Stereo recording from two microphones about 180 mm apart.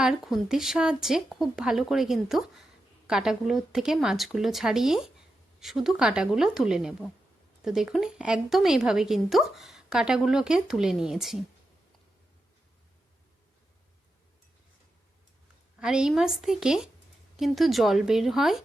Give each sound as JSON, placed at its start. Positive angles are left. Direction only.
{"t": 0.0, "sound": "a woman's voice", "side_deg": 0}
{"t": 15.8, "sound": "a woman's voice", "side_deg": -5}